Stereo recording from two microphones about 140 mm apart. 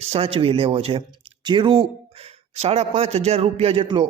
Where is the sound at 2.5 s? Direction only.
50° right (ahead or behind).